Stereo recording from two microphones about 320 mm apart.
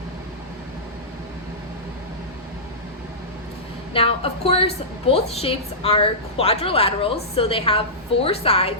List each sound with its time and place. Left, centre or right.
3.9 s a woman's voice: centre